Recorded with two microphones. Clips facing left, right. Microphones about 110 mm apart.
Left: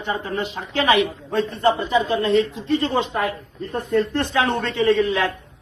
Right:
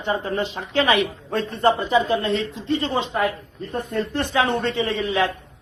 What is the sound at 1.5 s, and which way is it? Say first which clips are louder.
Speech: right 1 dB; 35° right (ahead or behind).